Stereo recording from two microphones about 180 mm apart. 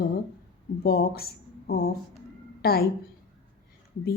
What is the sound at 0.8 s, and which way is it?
A woman's voice, 60° left (ahead or behind).